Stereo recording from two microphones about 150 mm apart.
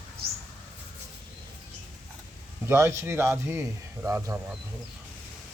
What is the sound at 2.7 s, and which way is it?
Speech, 15° right (ahead or behind).